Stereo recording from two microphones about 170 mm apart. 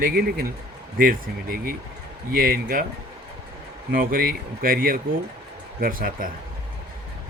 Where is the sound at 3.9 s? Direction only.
60° right (ahead or behind).